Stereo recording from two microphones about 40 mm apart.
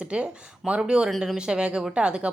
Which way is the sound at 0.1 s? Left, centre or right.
Right.